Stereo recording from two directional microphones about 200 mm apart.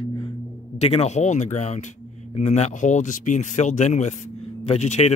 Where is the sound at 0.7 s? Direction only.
30° left (ahead or behind).